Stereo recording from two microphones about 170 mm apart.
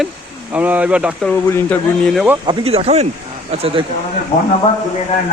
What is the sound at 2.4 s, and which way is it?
Speech, 35° right (ahead or behind).